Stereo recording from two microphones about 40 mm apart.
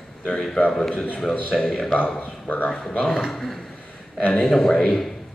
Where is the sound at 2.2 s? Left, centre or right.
Left.